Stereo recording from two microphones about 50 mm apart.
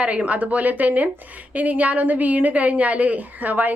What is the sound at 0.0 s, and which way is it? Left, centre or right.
Speech, right.